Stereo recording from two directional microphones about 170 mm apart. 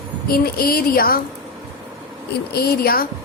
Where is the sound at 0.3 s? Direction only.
60° left (ahead or behind).